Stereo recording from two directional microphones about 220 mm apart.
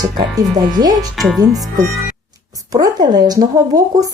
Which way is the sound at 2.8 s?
15° right (ahead or behind).